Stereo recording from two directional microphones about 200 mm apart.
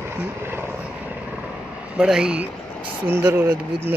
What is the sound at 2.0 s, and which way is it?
Speech, 5° right (ahead or behind).